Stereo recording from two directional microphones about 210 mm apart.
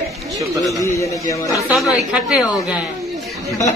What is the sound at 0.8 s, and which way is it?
Speech, 15° left (ahead or behind).